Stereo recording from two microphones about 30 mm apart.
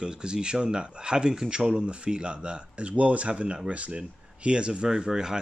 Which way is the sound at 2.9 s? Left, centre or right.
Right.